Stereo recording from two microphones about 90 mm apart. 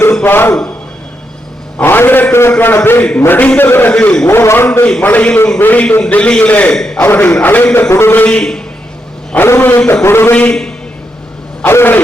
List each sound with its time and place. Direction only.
0.0 s a man's voice: 25° left (ahead or behind)
1.8 s a man's voice: 25° left (ahead or behind)
3.9 s a man's voice: 10° left (ahead or behind)
4.3 s a man's voice: 25° left (ahead or behind); by 7.0 s 5° left (ahead or behind)
7.0 s a man's voice: 20° left (ahead or behind)
9.3 s a man's voice: 25° left (ahead or behind)
10.3 s a man's voice: 10° left (ahead or behind)
11.6 s a man's voice: 25° left (ahead or behind)